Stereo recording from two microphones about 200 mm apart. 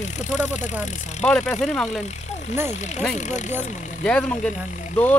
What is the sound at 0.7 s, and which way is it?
Speech, centre (ahead or behind).